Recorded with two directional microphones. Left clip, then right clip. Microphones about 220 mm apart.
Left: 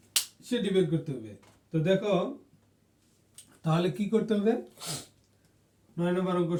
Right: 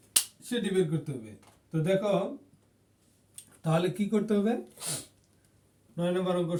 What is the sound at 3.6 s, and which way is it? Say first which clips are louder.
Speech: right 1 dB; 15° right (ahead or behind).